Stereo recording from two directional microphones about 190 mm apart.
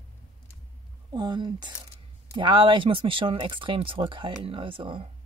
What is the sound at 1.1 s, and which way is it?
A woman's voice, 20° right (ahead or behind).